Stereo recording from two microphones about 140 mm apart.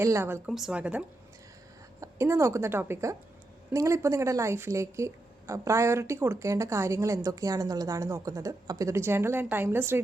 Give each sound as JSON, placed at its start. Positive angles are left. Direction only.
{"t": 0.0, "sound": "a woman's voice", "side_deg": -20}
{"t": 0.5, "sound": "a woman's voice", "side_deg": -5}